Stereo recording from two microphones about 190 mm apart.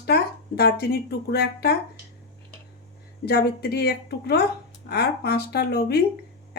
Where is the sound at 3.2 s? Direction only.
55° left (ahead or behind).